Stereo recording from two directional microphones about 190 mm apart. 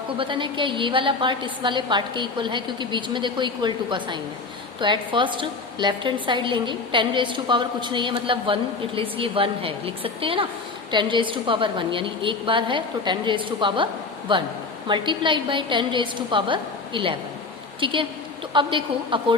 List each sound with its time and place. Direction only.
0.2 s a woman's voice: 25° right (ahead or behind)